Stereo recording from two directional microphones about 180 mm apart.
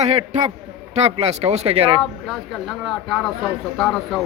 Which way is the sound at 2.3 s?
Centre (ahead or behind).